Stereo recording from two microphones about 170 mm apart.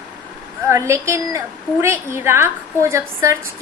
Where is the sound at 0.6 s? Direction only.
15° right (ahead or behind).